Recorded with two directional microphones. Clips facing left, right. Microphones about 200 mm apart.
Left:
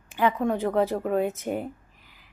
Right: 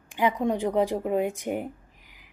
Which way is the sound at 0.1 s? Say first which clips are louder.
Left 1 dB; 15° right (ahead or behind).